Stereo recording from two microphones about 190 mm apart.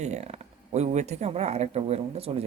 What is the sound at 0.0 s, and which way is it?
Speech, 35° right (ahead or behind).